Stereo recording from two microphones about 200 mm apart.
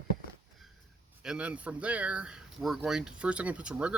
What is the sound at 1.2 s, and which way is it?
Speech, 5° right (ahead or behind).